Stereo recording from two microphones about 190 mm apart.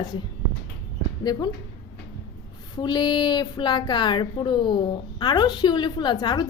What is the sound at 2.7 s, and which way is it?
A woman's voice, 20° left (ahead or behind).